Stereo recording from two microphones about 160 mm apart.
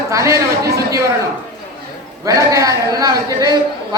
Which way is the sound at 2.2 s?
20° right (ahead or behind).